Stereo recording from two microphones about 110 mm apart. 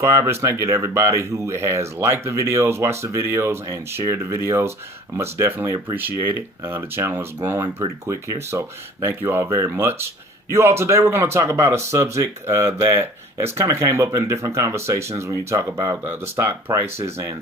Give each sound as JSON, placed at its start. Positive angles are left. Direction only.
{"t": 0.0, "sound": "speech", "side_deg": -25}